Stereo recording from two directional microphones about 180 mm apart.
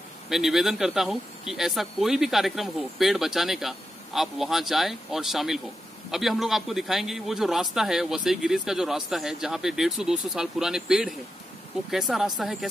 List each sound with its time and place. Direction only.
0.3 s speech: centre (ahead or behind)